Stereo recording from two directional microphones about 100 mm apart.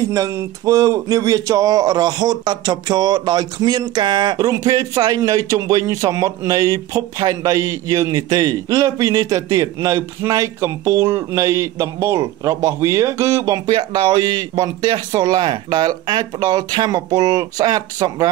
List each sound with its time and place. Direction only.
0.1 s a man's voice: 30° right (ahead or behind); by 4.4 s 50° right (ahead or behind)
4.4 s a man's voice: 35° right (ahead or behind)
13.7 s a man's voice: 50° right (ahead or behind)